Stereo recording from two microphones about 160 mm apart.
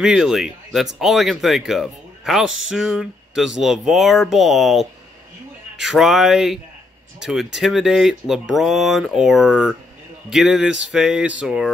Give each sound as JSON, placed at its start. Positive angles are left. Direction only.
{"t": 0.0, "sound": "speech", "side_deg": -5}